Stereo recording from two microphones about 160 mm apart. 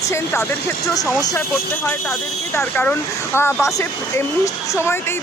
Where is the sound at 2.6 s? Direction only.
10° left (ahead or behind).